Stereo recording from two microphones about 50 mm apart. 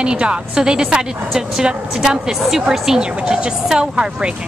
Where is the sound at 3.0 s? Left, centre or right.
Centre.